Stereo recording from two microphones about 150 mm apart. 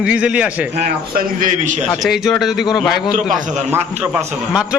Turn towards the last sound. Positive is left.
turn(degrees=-10)  # may be behind; listen again after turning